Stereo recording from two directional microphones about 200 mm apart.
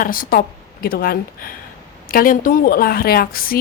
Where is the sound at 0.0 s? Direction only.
45° left (ahead or behind).